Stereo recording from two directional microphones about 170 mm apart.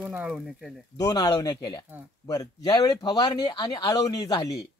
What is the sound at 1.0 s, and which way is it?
Speech, 25° left (ahead or behind).